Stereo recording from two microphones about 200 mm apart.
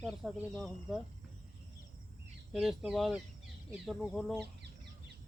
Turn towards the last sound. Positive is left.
turn(degrees=5)  # may be behind; listen again after turning